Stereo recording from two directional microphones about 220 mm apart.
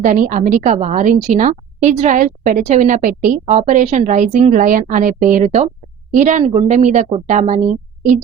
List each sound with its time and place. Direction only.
0.0 s a woman's voice: 35° right (ahead or behind)